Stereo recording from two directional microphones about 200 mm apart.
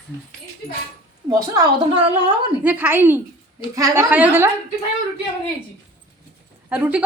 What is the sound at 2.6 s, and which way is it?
A woman's voice, 10° right (ahead or behind).